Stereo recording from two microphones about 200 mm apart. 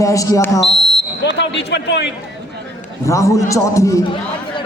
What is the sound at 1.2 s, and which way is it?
Basketball bounce, 60° left (ahead or behind).